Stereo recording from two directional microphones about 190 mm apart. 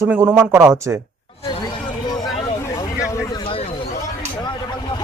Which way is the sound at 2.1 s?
20° left (ahead or behind).